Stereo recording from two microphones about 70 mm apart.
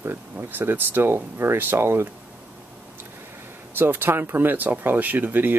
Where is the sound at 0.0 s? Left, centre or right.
Right.